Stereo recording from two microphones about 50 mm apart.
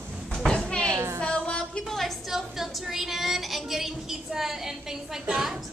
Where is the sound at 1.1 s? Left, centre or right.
Centre.